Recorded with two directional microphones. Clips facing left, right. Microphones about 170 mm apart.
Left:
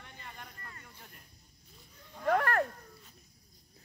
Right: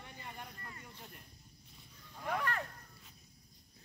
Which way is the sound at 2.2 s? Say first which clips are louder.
Left 9 dB; 60° left (ahead or behind).